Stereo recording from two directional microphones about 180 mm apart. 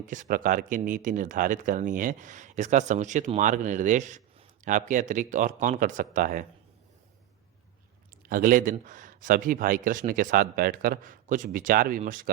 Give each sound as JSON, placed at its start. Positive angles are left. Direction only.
{"t": 0.1, "sound": "speech", "side_deg": -45}
{"t": 8.3, "sound": "speech", "side_deg": -50}